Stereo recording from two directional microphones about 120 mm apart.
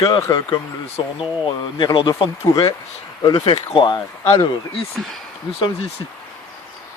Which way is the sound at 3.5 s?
60° left (ahead or behind).